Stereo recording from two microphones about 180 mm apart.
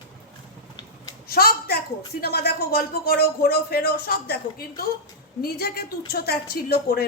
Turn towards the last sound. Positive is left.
turn(degrees=60)  # may be behind; listen again after turning